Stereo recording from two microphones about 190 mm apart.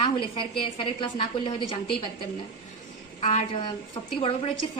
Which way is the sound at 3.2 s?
30° left (ahead or behind).